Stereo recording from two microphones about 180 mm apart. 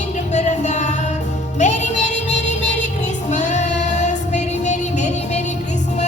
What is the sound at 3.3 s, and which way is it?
Female singing, 40° left (ahead or behind).